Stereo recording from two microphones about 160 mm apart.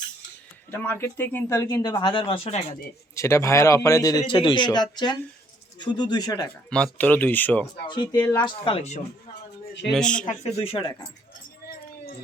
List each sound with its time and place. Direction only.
0.7 s speech: 15° left (ahead or behind); by 2.7 s 40° left (ahead or behind)
3.2 s speech: 15° left (ahead or behind)
6.7 s speech: 5° left (ahead or behind)
7.9 s speech: 30° left (ahead or behind)
9.9 s speech: 5° left (ahead or behind)
10.2 s speech: 40° left (ahead or behind)
10.8 s speech: 25° left (ahead or behind)